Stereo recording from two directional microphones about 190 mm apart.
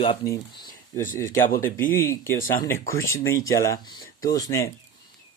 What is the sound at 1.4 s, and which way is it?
Speech, 45° left (ahead or behind).